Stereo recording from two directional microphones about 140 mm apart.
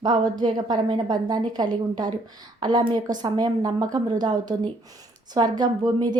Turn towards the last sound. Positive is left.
turn(degrees=-30)  # may be behind; listen again after turning